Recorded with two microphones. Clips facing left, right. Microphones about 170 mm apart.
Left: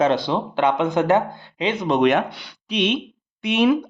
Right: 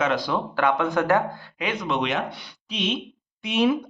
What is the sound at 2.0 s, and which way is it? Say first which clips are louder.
Speech: left 12 dB; 55° left (ahead or behind).